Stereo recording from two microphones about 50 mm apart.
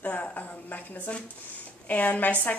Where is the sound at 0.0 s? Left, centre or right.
Left.